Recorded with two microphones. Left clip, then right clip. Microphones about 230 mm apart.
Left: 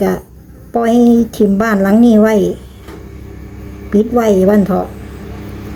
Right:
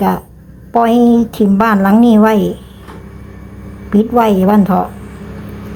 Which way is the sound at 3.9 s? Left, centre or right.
Centre.